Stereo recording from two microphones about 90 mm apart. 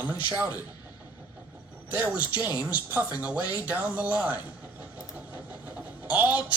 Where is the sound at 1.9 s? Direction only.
20° right (ahead or behind).